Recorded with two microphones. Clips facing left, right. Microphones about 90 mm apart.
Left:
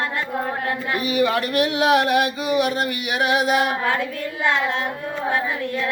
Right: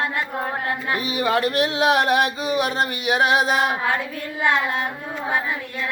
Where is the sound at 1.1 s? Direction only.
30° right (ahead or behind).